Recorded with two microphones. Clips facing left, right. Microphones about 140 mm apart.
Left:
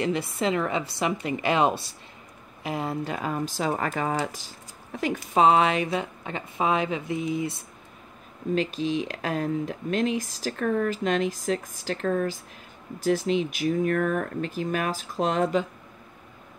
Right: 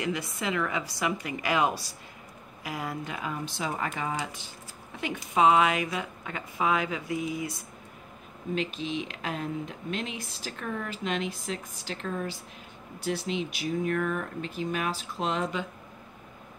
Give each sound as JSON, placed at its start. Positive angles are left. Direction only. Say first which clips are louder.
{"t": 0.0, "sound": "a woman's voice", "louder": "left 6 dB", "side_deg": 30}
{"t": 3.2, "sound": "a woman's voice", "louder": "left 5 dB", "side_deg": 45}
{"t": 8.5, "sound": "speech", "louder": "left 5 dB", "side_deg": 40}